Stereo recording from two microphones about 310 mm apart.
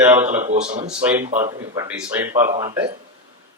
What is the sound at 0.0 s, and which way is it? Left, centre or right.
Speech, centre.